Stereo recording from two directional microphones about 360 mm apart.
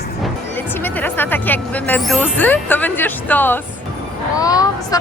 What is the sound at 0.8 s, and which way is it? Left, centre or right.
Speech, centre.